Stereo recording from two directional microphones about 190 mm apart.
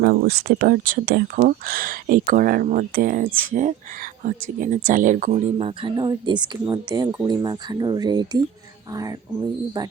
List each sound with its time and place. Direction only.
0.0 s speech: 55° right (ahead or behind); by 9.1 s 20° right (ahead or behind)